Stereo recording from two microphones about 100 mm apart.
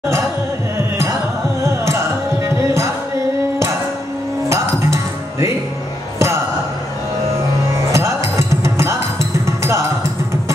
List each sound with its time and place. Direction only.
0.7 s music: 30° right (ahead or behind)
4.5 s music: 30° right (ahead or behind)
7.9 s music: 30° right (ahead or behind)